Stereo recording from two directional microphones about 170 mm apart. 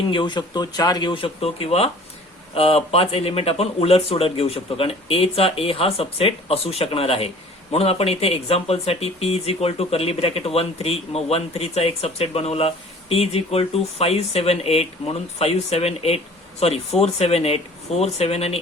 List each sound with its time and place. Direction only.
0.1 s speech: 25° left (ahead or behind)